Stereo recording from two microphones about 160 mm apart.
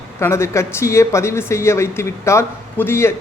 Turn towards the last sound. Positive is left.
turn(degrees=15)  # may be behind; listen again after turning